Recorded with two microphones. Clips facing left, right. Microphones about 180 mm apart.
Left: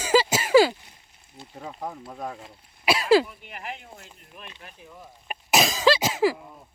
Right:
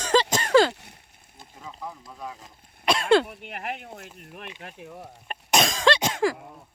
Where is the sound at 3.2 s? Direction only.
70° right (ahead or behind).